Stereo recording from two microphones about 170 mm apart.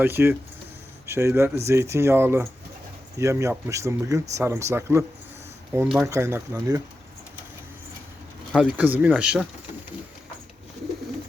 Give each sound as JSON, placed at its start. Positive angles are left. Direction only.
{"t": 0.0, "sound": "speech", "side_deg": -15}
{"t": 6.1, "sound": "speech", "side_deg": -15}
{"t": 8.5, "sound": "speech", "side_deg": -10}